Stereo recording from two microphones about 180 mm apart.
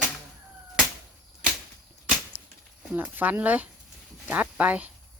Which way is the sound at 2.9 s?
10° right (ahead or behind).